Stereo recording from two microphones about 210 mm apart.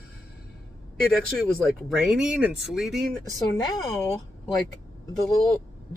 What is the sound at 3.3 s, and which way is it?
Speech, 15° left (ahead or behind).